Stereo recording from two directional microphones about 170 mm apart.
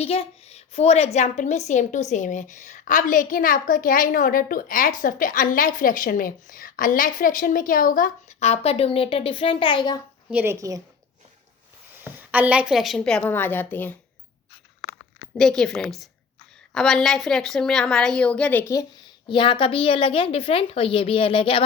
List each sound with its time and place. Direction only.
0.0 s a woman's voice: 35° left (ahead or behind)
10.2 s a woman's voice: 10° right (ahead or behind)
12.0 s a woman's voice: 10° right (ahead or behind); by 13.9 s 10° left (ahead or behind)
15.4 s a woman's voice: 5° left (ahead or behind); by 21.6 s 30° left (ahead or behind)